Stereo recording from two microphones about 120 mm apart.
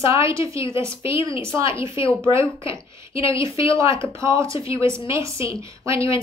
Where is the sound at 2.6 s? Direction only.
50° left (ahead or behind).